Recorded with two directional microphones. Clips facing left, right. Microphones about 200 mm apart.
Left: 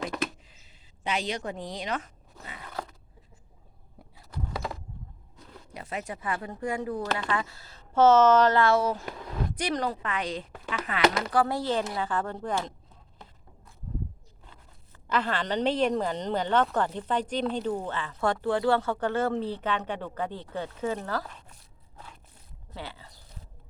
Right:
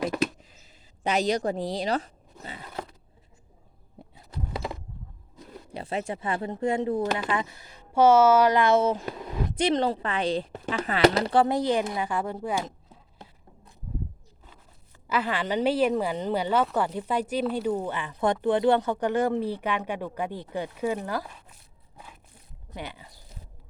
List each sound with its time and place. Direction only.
1.0 s speech: 40° right (ahead or behind)
3.9 s a sound: 25° right (ahead or behind)
5.7 s a woman's voice: 30° right (ahead or behind); by 12.7 s 10° right (ahead or behind)
15.0 s a woman's voice: 10° right (ahead or behind)
21.9 s crunch: 10° right (ahead or behind)
22.7 s a woman's voice: 15° right (ahead or behind)